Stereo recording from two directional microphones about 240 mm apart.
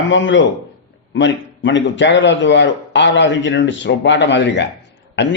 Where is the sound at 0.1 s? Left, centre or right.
Left.